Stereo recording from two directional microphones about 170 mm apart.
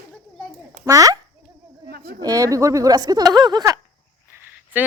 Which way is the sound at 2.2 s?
20° right (ahead or behind).